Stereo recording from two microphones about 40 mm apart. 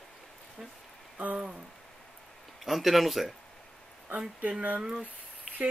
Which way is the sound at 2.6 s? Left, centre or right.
Centre.